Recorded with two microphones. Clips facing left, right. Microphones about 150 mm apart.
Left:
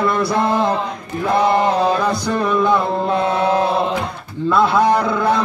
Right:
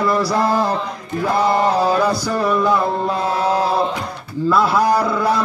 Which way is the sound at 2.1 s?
5° right (ahead or behind).